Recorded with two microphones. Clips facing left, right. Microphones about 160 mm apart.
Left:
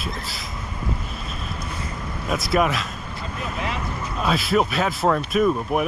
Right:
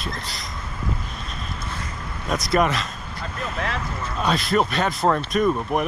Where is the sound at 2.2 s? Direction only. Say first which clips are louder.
Even; 5° left (ahead or behind).